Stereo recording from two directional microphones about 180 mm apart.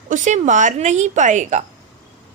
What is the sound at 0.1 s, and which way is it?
Speech, 40° right (ahead or behind).